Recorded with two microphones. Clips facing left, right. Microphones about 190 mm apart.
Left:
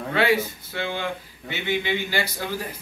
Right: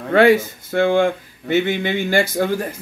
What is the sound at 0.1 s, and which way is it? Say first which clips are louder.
Speech: right 9 dB; 50° right (ahead or behind).